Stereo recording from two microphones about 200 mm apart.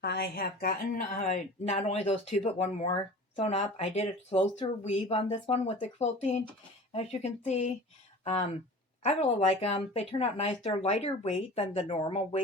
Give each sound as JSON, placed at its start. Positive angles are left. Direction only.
{"t": 0.0, "sound": "a woman's voice", "side_deg": 50}
{"t": 1.1, "sound": "speech", "side_deg": 40}